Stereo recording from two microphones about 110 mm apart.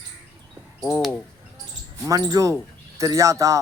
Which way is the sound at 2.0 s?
35° right (ahead or behind).